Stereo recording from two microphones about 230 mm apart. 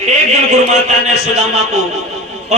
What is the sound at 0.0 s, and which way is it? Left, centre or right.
A man's voice, right.